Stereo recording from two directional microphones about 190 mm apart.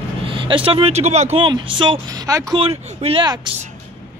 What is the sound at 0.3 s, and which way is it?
Speech, 30° right (ahead or behind).